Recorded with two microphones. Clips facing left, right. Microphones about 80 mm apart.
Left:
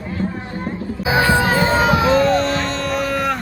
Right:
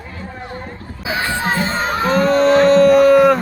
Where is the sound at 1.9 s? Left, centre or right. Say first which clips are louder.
Right 3 dB; centre.